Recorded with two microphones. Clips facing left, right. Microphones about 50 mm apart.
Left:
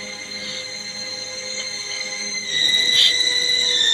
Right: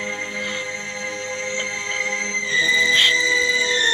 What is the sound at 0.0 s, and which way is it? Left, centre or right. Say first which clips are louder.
Music: right 7 dB; right.